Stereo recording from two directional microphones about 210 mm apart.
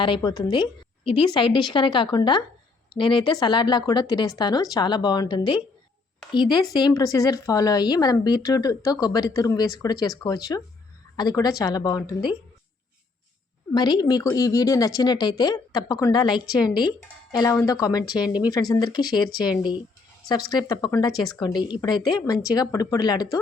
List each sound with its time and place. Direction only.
0.0 s a woman's voice: 20° left (ahead or behind)
13.7 s a woman's voice: 20° left (ahead or behind)